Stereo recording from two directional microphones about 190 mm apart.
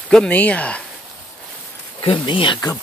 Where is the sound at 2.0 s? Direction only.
30° left (ahead or behind).